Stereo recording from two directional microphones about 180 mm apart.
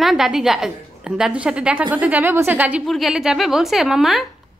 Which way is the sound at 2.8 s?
Centre (ahead or behind).